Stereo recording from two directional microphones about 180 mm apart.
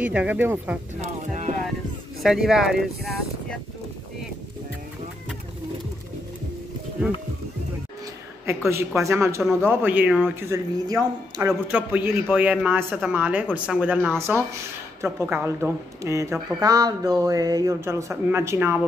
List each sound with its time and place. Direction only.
0.0 s speech: 10° right (ahead or behind)
1.0 s a sound: 40° right (ahead or behind)
2.2 s speech: centre (ahead or behind)
8.5 s speech: 15° right (ahead or behind)
10.5 s speech: 20° right (ahead or behind)